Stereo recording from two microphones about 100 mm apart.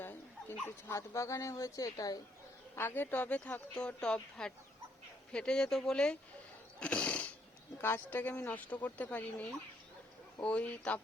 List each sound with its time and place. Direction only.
0.0 s dog: 20° left (ahead or behind)
0.9 s speech: 30° left (ahead or behind)
2.7 s speech: 20° left (ahead or behind)
6.7 s cat: 15° left (ahead or behind)
7.8 s speech: 20° left (ahead or behind)